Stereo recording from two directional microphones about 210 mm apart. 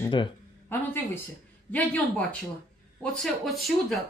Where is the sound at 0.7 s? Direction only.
10° left (ahead or behind).